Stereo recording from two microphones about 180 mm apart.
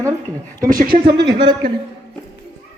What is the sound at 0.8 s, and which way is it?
Speech, 60° right (ahead or behind).